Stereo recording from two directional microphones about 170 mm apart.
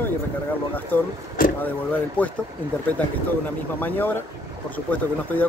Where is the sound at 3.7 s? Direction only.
10° left (ahead or behind).